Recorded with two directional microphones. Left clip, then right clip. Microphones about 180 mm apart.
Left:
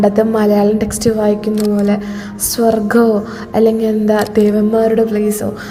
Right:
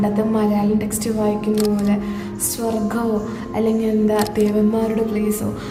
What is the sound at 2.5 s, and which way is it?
A woman's voice, 35° left (ahead or behind).